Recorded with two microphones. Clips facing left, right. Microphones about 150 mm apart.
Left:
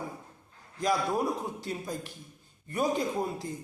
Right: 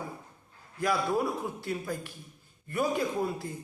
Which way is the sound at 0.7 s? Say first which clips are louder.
Even; 15° left (ahead or behind).